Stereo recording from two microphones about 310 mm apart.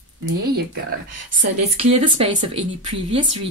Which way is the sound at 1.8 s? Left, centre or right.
Centre.